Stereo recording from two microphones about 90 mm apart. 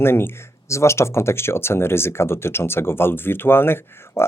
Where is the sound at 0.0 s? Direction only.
25° left (ahead or behind).